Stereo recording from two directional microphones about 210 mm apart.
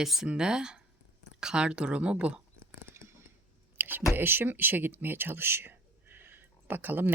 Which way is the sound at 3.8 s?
10° right (ahead or behind).